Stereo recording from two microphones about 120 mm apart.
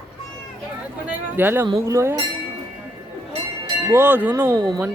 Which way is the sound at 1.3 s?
15° right (ahead or behind).